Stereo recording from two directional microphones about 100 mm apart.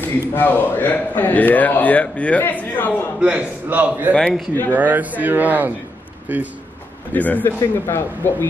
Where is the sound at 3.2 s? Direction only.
15° right (ahead or behind).